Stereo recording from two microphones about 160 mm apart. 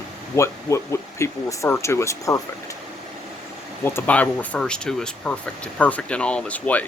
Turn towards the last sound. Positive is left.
turn(degrees=10)  # may be behind; listen again after turning